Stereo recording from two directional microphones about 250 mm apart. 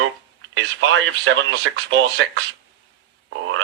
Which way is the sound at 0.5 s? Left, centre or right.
Right.